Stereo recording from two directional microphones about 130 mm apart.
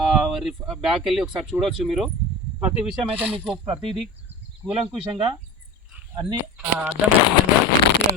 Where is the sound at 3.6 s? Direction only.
45° right (ahead or behind).